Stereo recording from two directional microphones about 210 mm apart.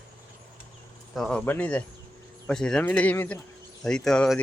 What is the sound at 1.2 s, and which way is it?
Speech, 5° left (ahead or behind).